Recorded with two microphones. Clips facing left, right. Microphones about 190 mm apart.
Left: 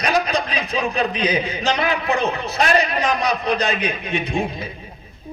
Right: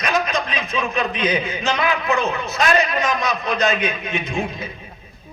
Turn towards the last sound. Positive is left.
turn(degrees=35)  # may be behind; listen again after turning